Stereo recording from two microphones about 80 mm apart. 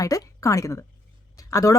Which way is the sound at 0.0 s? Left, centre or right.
Left.